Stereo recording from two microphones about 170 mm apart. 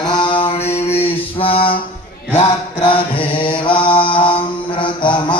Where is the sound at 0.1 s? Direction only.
30° left (ahead or behind).